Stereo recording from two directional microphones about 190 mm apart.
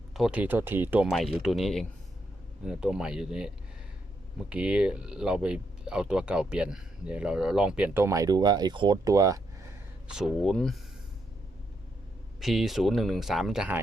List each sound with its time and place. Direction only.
0.1 s speech: 5° right (ahead or behind)
10.1 s speech: centre (ahead or behind)
12.4 s speech: centre (ahead or behind)